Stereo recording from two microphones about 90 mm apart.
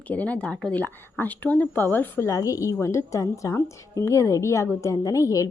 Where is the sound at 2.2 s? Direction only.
35° left (ahead or behind).